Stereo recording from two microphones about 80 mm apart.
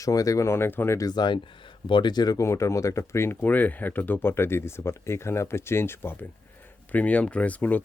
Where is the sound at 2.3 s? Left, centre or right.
Left.